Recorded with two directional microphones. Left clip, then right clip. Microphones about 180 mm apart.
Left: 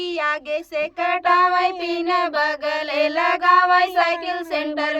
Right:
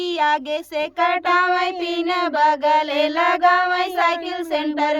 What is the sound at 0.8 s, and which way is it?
Child singing, 50° right (ahead or behind).